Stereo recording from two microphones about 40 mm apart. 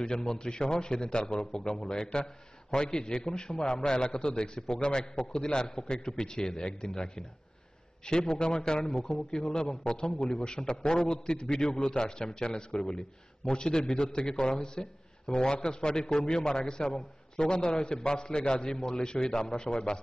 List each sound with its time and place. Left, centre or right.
0.0 s a man's voice: centre
19.6 s a man's voice: left